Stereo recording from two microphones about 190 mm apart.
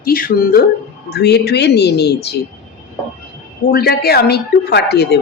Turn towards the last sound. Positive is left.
turn(degrees=60)  # may be behind; listen again after turning